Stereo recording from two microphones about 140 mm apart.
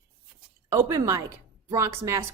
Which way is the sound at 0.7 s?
25° right (ahead or behind).